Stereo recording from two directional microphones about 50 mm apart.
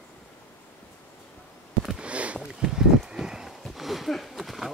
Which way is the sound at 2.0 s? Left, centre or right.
Right.